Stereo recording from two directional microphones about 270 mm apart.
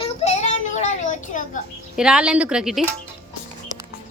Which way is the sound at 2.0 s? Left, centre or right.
Centre.